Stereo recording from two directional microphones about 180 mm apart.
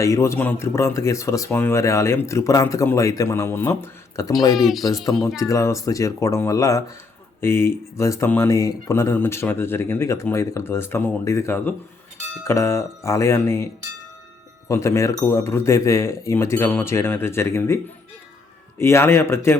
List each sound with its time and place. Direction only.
0.0 s speech: 15° left (ahead or behind)
4.5 s speech: centre (ahead or behind)
5.4 s speech: 15° left (ahead or behind)
14.7 s speech: 15° left (ahead or behind)
18.8 s speech: 15° left (ahead or behind)